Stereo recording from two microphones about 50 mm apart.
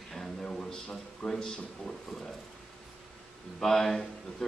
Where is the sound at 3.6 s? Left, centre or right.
Centre.